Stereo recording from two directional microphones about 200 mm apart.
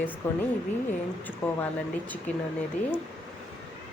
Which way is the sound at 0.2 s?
10° left (ahead or behind).